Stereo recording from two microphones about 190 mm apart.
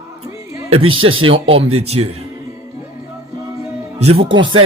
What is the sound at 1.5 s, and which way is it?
Speech, 30° right (ahead or behind).